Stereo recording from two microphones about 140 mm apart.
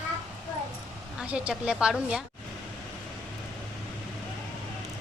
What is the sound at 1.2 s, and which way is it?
A woman's voice, 10° right (ahead or behind).